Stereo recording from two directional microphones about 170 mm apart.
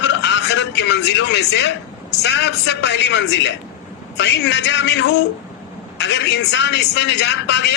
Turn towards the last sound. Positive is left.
turn(degrees=90)